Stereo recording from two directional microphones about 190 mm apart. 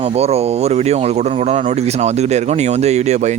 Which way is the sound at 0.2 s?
35° right (ahead or behind).